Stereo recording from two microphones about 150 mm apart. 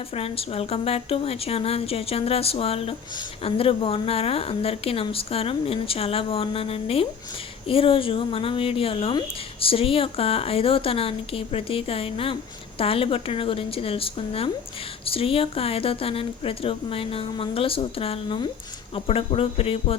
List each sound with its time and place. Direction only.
0.1 s a woman's voice: 40° left (ahead or behind)